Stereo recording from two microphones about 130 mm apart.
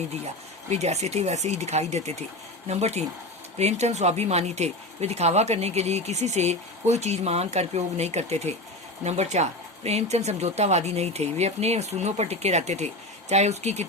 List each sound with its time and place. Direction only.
0.7 s speech: 55° right (ahead or behind)